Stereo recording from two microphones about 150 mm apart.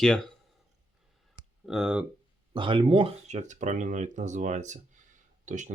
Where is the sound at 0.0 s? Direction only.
5° left (ahead or behind).